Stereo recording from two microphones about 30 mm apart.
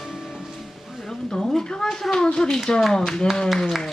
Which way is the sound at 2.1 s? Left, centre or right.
Left.